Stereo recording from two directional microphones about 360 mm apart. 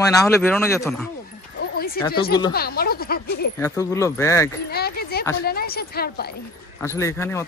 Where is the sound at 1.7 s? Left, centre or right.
Left.